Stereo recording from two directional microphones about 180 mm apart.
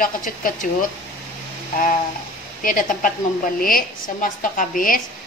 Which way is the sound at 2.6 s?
50° left (ahead or behind).